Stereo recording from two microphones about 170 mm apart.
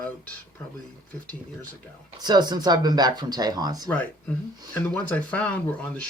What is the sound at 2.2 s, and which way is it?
Speech, 25° right (ahead or behind).